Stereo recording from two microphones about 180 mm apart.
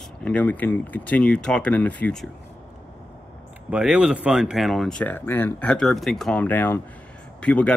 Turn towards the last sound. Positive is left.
turn(degrees=5)  # may be behind; listen again after turning